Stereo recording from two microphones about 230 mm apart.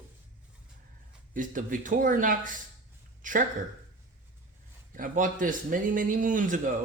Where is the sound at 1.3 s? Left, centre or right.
Right.